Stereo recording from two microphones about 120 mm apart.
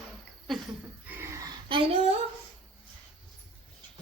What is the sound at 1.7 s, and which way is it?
Speech, 50° right (ahead or behind).